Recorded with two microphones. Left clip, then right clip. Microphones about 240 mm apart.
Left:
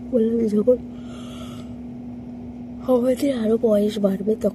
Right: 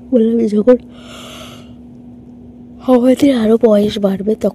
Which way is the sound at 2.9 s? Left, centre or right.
Right.